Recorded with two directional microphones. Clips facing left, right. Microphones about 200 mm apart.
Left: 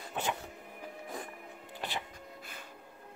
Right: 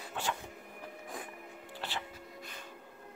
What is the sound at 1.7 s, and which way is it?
Music, 15° left (ahead or behind).